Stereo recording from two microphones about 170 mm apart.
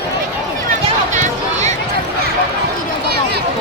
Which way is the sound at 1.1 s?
45° right (ahead or behind).